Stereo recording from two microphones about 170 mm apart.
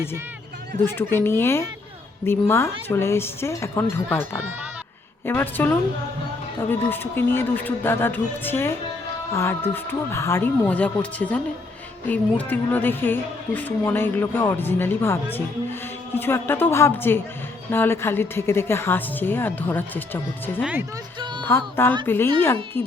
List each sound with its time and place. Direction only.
0.9 s a woman's voice: 15° left (ahead or behind)
20.6 s speech: 5° right (ahead or behind)
21.2 s music: 25° right (ahead or behind)
21.4 s a woman's voice: 15° left (ahead or behind)